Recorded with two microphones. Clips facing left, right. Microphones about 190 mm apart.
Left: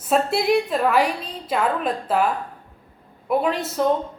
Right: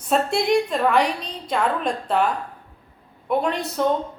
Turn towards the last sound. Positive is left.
turn(degrees=5)  # may be behind; listen again after turning